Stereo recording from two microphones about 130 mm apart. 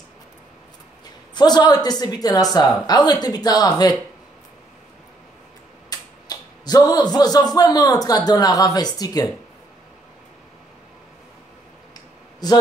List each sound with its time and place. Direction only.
1.3 s speech: 35° left (ahead or behind)
5.9 s speech: 30° left (ahead or behind)